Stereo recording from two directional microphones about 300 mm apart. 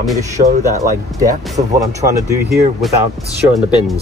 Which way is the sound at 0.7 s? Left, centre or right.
Right.